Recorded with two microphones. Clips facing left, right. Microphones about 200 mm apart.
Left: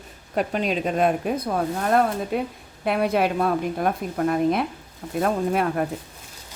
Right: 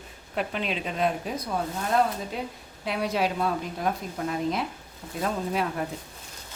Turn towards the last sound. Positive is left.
turn(degrees=55)  # may be behind; listen again after turning